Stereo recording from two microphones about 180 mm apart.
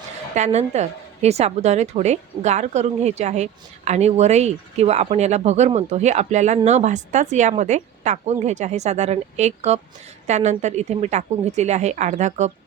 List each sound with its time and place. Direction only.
0.3 s a woman's voice: 40° right (ahead or behind)